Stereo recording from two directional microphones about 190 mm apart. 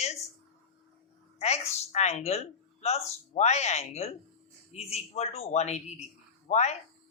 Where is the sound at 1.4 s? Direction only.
35° left (ahead or behind).